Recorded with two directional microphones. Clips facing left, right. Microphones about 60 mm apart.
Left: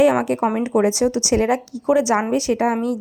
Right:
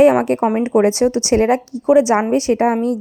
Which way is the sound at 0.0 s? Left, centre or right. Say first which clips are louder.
Right 4 dB; right.